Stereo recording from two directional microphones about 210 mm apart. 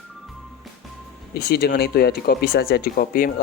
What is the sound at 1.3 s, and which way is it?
Speech, 50° left (ahead or behind).